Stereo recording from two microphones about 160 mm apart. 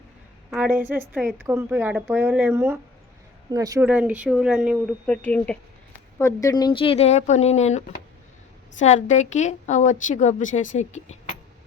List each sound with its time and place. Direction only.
0.5 s speech: 10° right (ahead or behind)
3.8 s speech: 10° right (ahead or behind)
5.0 s a woman's voice: 10° left (ahead or behind); by 11.2 s 45° left (ahead or behind)